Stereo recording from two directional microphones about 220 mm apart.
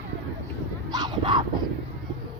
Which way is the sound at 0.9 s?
20° right (ahead or behind).